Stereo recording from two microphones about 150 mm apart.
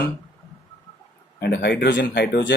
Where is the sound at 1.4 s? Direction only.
90° left.